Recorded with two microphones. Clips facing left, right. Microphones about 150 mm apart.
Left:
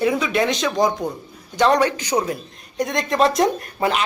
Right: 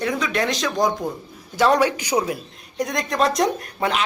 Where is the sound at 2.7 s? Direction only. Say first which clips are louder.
Left 3 dB; centre (ahead or behind).